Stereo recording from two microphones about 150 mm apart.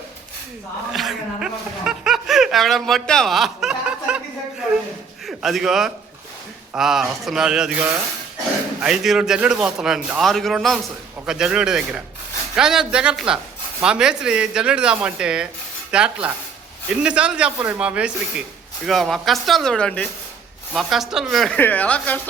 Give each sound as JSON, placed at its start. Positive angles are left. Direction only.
{"t": 0.9, "sound": "speech", "side_deg": -5}
{"t": 5.2, "sound": "a man's voice", "side_deg": 0}